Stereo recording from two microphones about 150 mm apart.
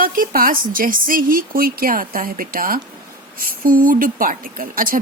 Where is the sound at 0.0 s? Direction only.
70° right (ahead or behind).